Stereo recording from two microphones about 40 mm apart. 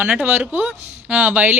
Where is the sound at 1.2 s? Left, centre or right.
Right.